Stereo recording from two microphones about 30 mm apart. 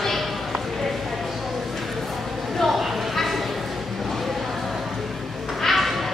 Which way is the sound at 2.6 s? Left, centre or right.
Centre.